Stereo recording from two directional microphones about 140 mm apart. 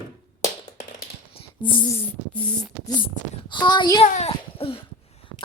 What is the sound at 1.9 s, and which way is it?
Speech, 10° left (ahead or behind).